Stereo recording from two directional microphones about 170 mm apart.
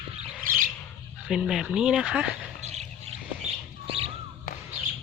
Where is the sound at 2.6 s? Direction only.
40° right (ahead or behind).